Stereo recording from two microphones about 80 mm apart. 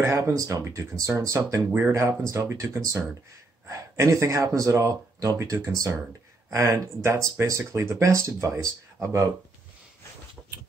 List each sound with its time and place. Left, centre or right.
0.0 s speech: right